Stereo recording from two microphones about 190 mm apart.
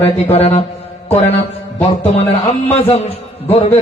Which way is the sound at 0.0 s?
30° left (ahead or behind).